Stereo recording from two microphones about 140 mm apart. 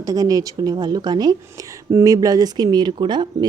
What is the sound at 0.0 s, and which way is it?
Speech, 25° right (ahead or behind).